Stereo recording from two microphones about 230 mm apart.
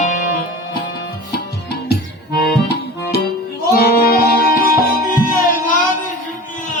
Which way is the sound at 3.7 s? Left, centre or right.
Left.